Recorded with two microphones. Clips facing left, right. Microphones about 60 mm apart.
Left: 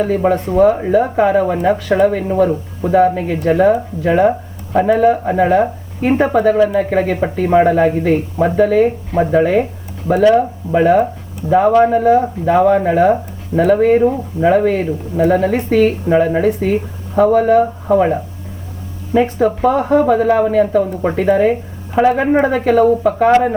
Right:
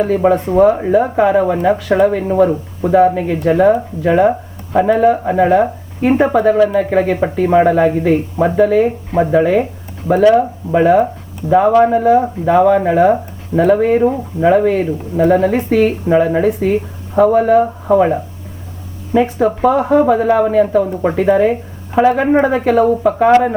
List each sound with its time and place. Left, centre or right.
0.0 s speech: centre
19.1 s speech: right
19.6 s speech: centre